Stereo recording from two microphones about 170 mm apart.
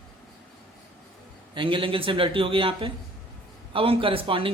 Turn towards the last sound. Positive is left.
turn(degrees=-30)  # may be behind; listen again after turning